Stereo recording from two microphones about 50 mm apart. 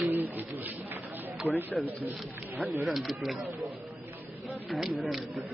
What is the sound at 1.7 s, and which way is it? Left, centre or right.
A man's voice, centre.